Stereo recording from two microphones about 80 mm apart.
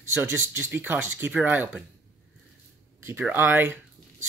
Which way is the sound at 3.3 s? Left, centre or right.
Right.